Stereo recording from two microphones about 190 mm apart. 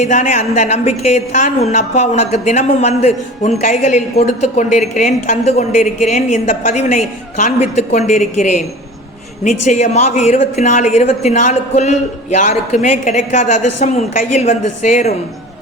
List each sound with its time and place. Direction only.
0.0 s a woman's voice: 40° left (ahead or behind)